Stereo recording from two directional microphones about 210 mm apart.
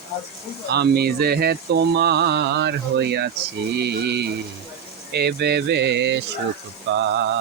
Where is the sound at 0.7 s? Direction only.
50° right (ahead or behind).